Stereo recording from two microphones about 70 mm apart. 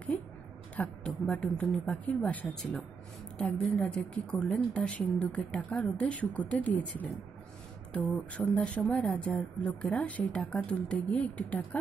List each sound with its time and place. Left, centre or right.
0.1 s a sound: left
0.7 s speech: centre
2.0 s a woman's voice: left
3.3 s a woman's voice: centre